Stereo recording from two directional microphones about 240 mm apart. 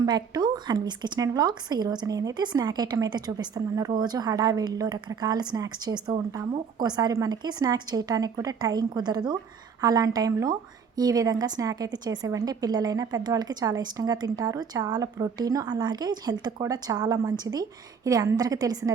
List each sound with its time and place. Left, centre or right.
0.0 s speech: centre